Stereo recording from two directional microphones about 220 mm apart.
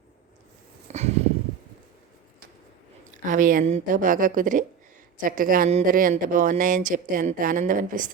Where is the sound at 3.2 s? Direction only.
35° right (ahead or behind).